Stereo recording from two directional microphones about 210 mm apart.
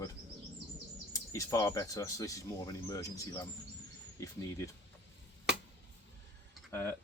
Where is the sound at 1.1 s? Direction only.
15° left (ahead or behind).